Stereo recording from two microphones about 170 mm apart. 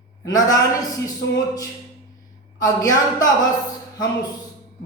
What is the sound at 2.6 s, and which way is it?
Speech, 20° left (ahead or behind).